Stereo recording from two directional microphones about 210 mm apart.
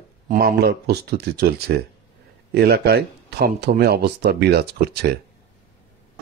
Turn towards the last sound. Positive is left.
turn(degrees=-50)  # may be behind; listen again after turning